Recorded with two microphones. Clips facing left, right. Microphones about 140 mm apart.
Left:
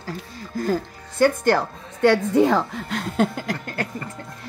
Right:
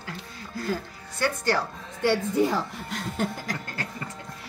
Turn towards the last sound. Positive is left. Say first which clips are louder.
# left 6 dB
turn(degrees=70)  # may be behind; listen again after turning